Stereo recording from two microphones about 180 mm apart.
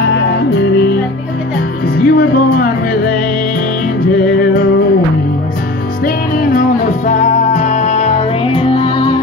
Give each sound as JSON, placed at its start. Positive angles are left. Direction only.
{"t": 0.0, "sound": "music", "side_deg": 70}
{"t": 2.0, "sound": "music", "side_deg": 55}
{"t": 6.0, "sound": "music", "side_deg": 50}